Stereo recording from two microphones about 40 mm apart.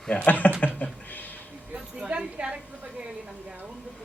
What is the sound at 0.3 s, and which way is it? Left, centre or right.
Speech, left.